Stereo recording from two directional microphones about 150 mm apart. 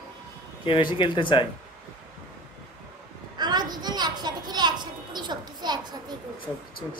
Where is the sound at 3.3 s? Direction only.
30° right (ahead or behind).